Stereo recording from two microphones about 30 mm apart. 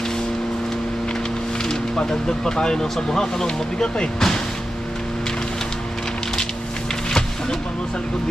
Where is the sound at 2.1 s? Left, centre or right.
Left.